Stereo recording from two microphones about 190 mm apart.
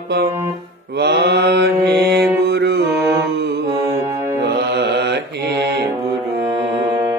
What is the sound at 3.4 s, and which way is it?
Mantra, 60° right (ahead or behind).